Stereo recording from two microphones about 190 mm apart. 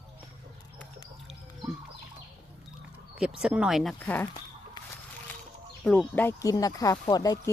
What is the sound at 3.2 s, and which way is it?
Speech, 5° right (ahead or behind).